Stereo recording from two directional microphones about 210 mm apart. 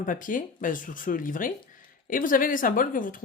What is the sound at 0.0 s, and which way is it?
Speech, 40° left (ahead or behind).